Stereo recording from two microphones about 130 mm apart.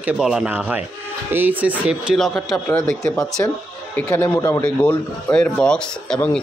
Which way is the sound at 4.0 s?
20° left (ahead or behind).